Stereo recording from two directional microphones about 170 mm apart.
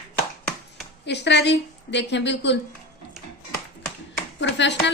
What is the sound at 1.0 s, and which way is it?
A woman's voice, 90° left.